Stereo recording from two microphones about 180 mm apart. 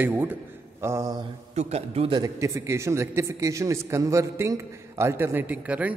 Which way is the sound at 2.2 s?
20° right (ahead or behind).